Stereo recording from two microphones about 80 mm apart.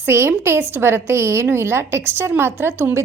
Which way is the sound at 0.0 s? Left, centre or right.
Right.